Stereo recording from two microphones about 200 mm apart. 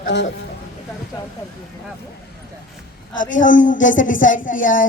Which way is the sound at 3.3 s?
40° left (ahead or behind).